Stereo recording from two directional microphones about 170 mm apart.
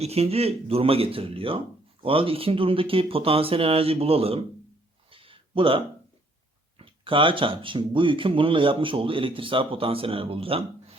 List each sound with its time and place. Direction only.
0.0 s speech: 35° right (ahead or behind)
5.1 s a sound: 30° right (ahead or behind)
6.7 s speech: 30° right (ahead or behind)